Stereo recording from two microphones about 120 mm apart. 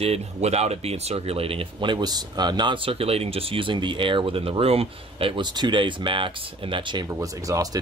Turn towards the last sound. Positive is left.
turn(degrees=-30)  # may be behind; listen again after turning